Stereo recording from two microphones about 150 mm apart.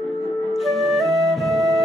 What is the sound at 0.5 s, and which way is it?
Flute, centre (ahead or behind).